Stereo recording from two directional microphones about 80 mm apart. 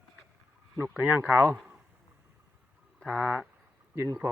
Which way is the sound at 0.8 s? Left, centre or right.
Right.